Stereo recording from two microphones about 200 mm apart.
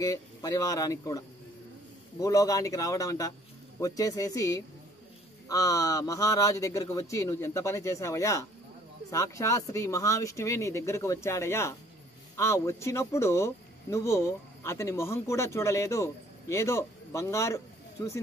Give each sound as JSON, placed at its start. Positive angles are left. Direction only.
{"t": 0.0, "sound": "speech", "side_deg": 15}